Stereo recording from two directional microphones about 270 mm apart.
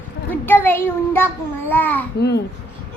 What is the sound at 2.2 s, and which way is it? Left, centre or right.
Speech, left.